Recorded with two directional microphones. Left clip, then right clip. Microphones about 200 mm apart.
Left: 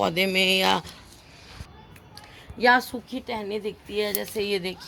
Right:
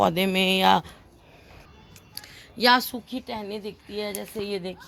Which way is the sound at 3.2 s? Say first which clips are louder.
Left 6 dB; 30° right (ahead or behind).